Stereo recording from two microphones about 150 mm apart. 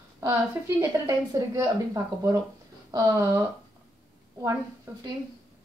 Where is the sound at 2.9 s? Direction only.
25° right (ahead or behind).